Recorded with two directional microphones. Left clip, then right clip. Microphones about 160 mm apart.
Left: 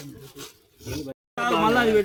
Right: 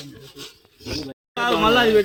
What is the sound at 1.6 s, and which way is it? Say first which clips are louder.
Speech: right 4 dB; 5° left (ahead or behind).